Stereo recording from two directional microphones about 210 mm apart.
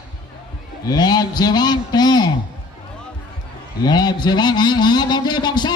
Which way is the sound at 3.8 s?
20° left (ahead or behind).